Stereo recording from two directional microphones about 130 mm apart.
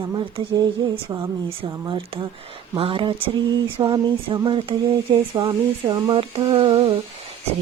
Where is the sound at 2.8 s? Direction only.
40° right (ahead or behind).